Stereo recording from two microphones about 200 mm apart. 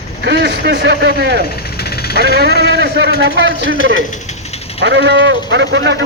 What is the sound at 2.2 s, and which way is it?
A man's voice, 55° right (ahead or behind).